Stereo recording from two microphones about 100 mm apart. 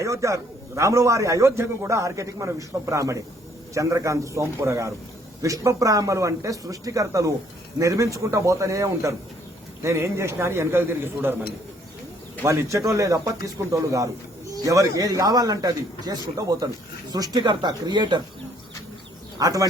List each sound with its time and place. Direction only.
0.0 s a man's voice: 30° right (ahead or behind)
12.4 s a man's voice: 30° right (ahead or behind); by 18.2 s 50° right (ahead or behind)
19.4 s a man's voice: 35° right (ahead or behind)